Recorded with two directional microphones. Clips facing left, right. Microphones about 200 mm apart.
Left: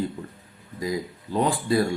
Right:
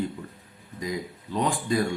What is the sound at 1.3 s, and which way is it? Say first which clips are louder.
Speech: left 4 dB; 35° left (ahead or behind).